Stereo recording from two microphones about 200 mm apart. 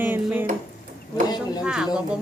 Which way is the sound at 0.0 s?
10° right (ahead or behind).